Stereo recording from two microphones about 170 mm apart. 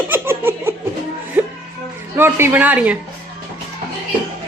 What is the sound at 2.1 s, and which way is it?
Speech, 15° right (ahead or behind).